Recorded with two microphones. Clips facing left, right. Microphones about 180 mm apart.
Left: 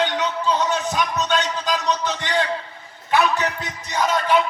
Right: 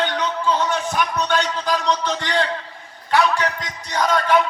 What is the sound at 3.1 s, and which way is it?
Music, 10° left (ahead or behind).